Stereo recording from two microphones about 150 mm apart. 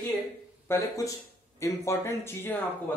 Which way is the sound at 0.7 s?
20° left (ahead or behind).